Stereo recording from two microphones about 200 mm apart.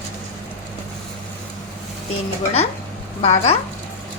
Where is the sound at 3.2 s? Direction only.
30° left (ahead or behind).